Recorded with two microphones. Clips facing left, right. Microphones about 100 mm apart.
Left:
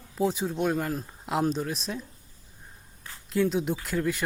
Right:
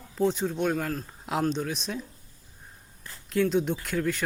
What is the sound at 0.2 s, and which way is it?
Speech, 5° left (ahead or behind).